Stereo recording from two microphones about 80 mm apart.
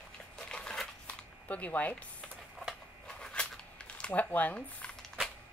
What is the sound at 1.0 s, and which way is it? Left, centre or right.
Computer keyboard, centre.